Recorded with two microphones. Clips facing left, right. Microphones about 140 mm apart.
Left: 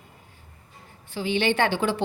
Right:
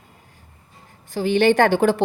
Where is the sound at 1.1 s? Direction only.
45° right (ahead or behind).